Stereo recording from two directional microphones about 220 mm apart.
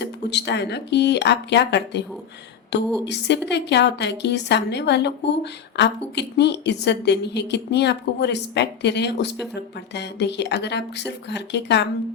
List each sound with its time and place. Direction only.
0.0 s a woman's voice: 50° left (ahead or behind)